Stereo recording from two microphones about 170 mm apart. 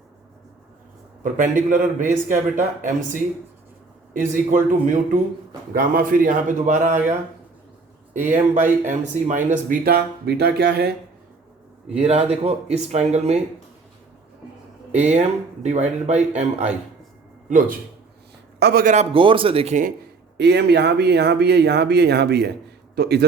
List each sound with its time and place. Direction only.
1.2 s a man's voice: 50° right (ahead or behind); by 10.9 s 70° right (ahead or behind)
11.9 s speech: 35° right (ahead or behind)
14.9 s a man's voice: 45° right (ahead or behind)
18.6 s speech: 60° right (ahead or behind)
18.9 s speech: 30° right (ahead or behind)
20.3 s speech: 80° right